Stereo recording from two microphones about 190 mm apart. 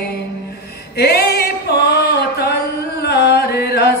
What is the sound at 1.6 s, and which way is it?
Music, 60° left (ahead or behind).